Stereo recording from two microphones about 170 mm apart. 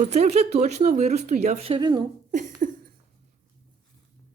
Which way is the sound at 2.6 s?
50° right (ahead or behind).